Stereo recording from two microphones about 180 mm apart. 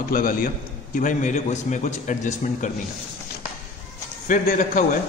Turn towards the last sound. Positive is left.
turn(degrees=45)  # may be behind; listen again after turning